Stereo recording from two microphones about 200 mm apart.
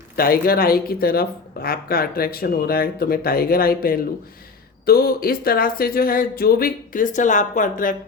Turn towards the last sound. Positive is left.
turn(degrees=40)  # may be behind; listen again after turning